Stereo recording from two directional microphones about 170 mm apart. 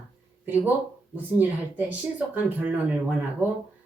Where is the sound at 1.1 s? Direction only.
10° right (ahead or behind).